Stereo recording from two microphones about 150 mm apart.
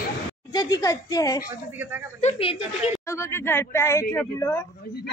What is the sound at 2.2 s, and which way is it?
Speech, 40° left (ahead or behind).